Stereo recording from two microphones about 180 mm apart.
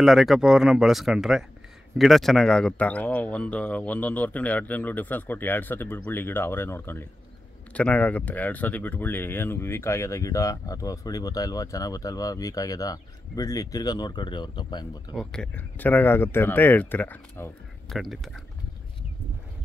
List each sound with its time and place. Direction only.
0.0 s speech: centre (ahead or behind); by 15.1 s 25° left (ahead or behind)
15.1 s speech: 5° left (ahead or behind)